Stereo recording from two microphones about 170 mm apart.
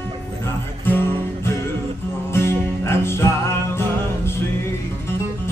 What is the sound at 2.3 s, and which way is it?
Music, 15° left (ahead or behind).